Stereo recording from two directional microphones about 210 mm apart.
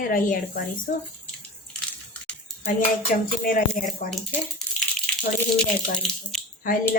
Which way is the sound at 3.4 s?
40° left (ahead or behind).